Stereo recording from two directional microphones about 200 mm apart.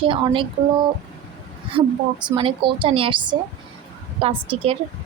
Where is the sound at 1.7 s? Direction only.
30° right (ahead or behind).